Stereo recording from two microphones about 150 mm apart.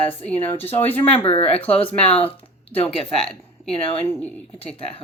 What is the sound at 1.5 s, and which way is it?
Speech, 10° left (ahead or behind).